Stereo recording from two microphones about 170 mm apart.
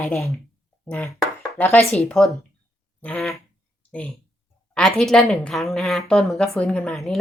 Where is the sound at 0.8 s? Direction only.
10° left (ahead or behind).